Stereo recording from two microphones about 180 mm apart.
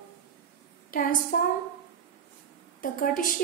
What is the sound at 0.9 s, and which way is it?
Speech, 50° left (ahead or behind).